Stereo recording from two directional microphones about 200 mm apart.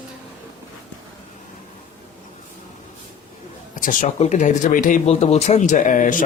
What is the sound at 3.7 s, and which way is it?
Speech, 40° left (ahead or behind).